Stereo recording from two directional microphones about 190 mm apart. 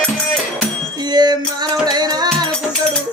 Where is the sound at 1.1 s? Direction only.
20° right (ahead or behind).